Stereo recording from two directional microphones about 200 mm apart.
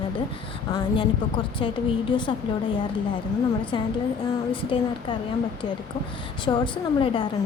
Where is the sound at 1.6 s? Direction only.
25° left (ahead or behind).